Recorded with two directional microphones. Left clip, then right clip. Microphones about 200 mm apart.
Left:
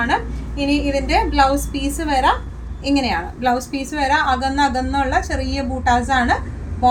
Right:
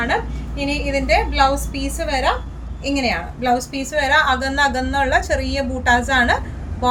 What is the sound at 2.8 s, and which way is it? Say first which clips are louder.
A woman's voice: left 1 dB; 25° right (ahead or behind).